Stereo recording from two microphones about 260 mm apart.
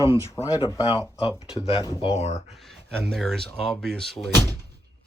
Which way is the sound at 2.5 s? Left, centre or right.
Centre.